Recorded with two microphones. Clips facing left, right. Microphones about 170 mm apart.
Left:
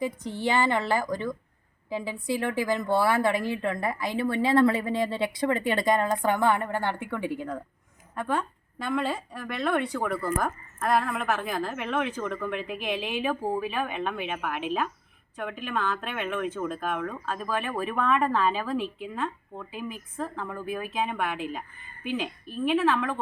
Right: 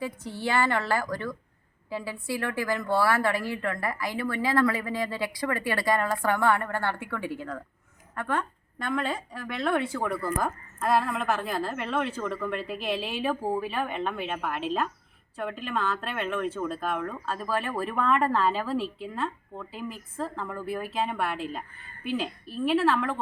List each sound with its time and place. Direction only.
0.0 s a woman's voice: 15° left (ahead or behind)
20.4 s a woman's voice: centre (ahead or behind)
20.7 s a woman's voice: 15° left (ahead or behind)